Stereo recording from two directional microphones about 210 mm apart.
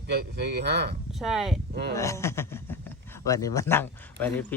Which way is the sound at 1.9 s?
15° left (ahead or behind).